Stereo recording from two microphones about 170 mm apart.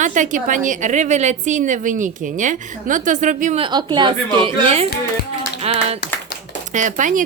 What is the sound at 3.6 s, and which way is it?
A woman's voice, 25° right (ahead or behind).